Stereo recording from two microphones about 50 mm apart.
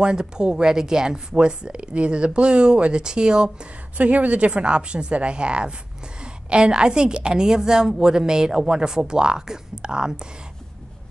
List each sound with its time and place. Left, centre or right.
0.0 s a woman's voice: centre
4.0 s a woman's voice: right